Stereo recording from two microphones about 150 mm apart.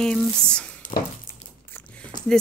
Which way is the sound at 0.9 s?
40° left (ahead or behind).